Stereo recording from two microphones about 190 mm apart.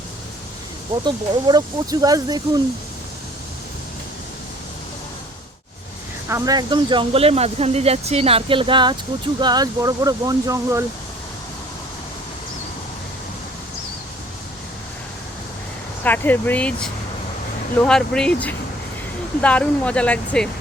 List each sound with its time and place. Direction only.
1.0 s speech: 20° right (ahead or behind)
6.2 s speech: 15° right (ahead or behind)
16.0 s speech: 10° left (ahead or behind)